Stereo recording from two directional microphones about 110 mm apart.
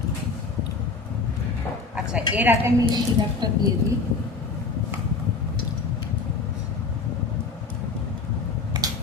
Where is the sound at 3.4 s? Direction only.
40° right (ahead or behind).